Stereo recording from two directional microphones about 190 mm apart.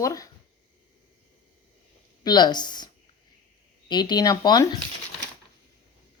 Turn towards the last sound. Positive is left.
turn(degrees=20)  # may be behind; listen again after turning